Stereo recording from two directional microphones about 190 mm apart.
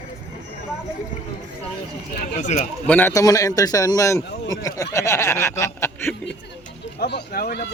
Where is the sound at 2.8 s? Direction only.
10° left (ahead or behind).